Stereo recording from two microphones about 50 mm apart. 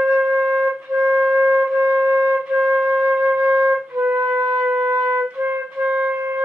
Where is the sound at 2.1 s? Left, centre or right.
Centre.